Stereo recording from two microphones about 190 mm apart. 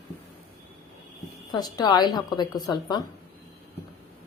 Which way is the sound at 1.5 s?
20° left (ahead or behind).